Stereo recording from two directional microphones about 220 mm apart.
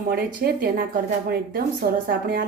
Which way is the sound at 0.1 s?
45° right (ahead or behind).